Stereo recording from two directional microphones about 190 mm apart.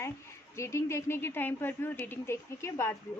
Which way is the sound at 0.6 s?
15° left (ahead or behind).